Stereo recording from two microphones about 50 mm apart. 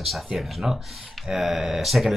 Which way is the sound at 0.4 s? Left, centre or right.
Centre.